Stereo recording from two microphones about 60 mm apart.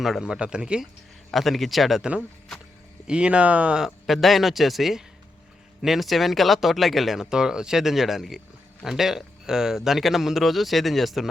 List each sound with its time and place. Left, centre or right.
0.0 s speech: centre
0.3 s speech: centre
1.3 s speech: centre
2.0 s speech: centre
3.8 s speech: centre
7.3 s speech: centre